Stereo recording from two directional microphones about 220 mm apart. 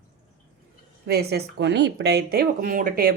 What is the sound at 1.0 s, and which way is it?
Speech, 45° right (ahead or behind).